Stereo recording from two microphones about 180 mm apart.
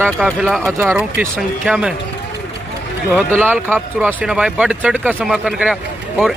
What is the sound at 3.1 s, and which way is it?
Speech, 10° right (ahead or behind).